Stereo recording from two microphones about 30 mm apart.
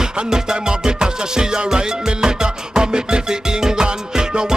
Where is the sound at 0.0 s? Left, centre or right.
Right.